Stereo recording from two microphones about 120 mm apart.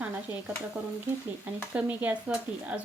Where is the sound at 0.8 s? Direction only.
10° right (ahead or behind).